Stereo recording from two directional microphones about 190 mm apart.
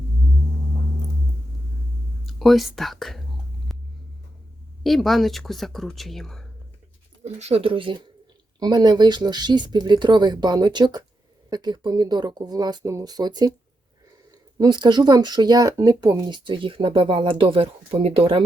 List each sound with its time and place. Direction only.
2.2 s speech: centre (ahead or behind)
3.7 s vehicle: centre (ahead or behind)
4.8 s speech: centre (ahead or behind)
7.3 s speech: 35° right (ahead or behind)
14.6 s speech: 25° right (ahead or behind)